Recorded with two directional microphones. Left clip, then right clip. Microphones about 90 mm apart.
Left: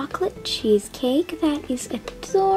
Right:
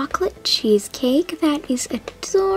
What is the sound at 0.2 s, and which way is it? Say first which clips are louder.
Speech: right 2 dB; 35° right (ahead or behind).